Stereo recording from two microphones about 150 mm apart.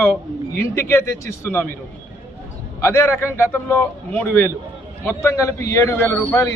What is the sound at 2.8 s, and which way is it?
A man's voice, 15° left (ahead or behind).